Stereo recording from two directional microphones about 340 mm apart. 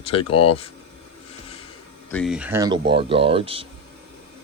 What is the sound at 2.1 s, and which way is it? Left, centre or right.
Speech, centre.